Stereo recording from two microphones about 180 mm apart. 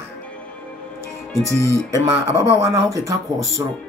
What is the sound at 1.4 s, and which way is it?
Speech, 15° left (ahead or behind).